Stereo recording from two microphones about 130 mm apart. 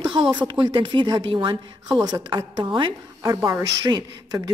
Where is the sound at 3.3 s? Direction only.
20° right (ahead or behind).